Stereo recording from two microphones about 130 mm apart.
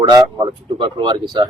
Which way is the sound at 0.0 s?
30° right (ahead or behind).